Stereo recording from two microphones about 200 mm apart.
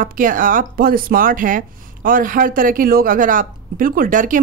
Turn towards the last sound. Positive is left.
turn(degrees=-40)  # may be behind; listen again after turning